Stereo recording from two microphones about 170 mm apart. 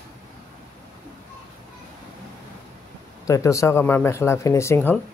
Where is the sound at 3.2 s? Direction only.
20° left (ahead or behind).